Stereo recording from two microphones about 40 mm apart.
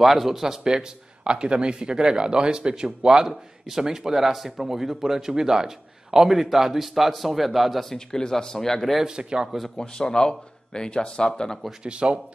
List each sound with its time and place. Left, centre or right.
0.0 s a man's voice: centre
1.2 s a man's voice: right; by 7.8 s centre
7.9 s speech: centre
9.0 s speech: centre
9.8 s speech: centre
11.8 s speech: right